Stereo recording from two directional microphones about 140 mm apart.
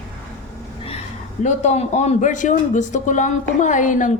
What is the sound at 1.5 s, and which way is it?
A man's voice, 50° left (ahead or behind).